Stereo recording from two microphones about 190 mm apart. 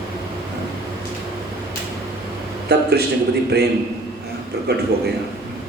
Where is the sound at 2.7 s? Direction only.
60° right (ahead or behind).